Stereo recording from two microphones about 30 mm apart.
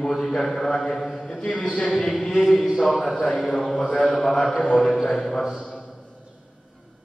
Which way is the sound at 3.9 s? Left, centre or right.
Left.